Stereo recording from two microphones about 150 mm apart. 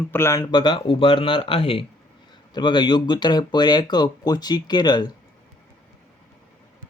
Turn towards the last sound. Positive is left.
turn(degrees=30)  # may be behind; listen again after turning